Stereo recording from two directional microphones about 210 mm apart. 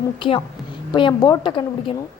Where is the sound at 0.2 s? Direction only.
25° left (ahead or behind).